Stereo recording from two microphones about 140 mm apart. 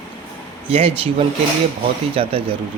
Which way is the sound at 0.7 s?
45° right (ahead or behind).